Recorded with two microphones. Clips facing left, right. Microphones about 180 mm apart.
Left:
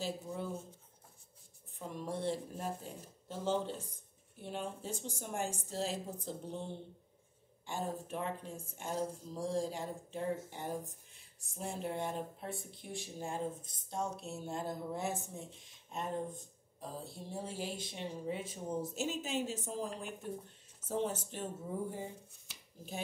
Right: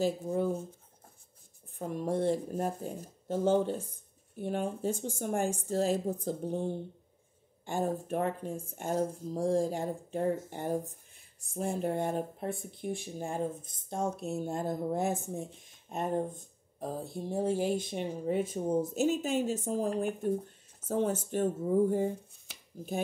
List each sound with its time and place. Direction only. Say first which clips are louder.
0.0 s speech: right 10 dB; 50° right (ahead or behind)
1.8 s speech: right 8 dB; 50° right (ahead or behind)